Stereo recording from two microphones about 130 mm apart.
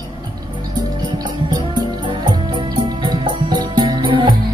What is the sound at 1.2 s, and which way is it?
Music, 35° right (ahead or behind).